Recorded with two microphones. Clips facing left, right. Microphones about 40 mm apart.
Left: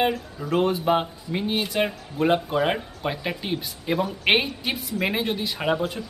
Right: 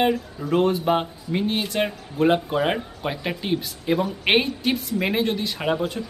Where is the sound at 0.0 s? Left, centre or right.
Centre.